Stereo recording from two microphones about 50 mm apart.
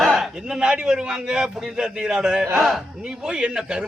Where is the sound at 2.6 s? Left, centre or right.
Centre.